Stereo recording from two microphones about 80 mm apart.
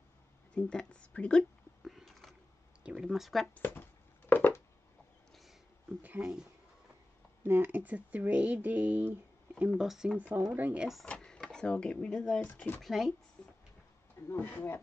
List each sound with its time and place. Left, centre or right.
0.6 s speech: centre
1.9 s a sound: centre
2.8 s speech: centre
3.5 s a sound: left
6.0 s speech: centre
7.4 s speech: right
9.7 s speech: centre
10.5 s speech: centre
11.1 s speech: centre; by 12.8 s left
12.8 s speech: centre
13.4 s a sound: centre
14.3 s speech: left